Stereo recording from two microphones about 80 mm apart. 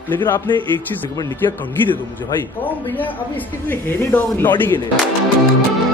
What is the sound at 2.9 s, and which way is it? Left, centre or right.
Speech, left.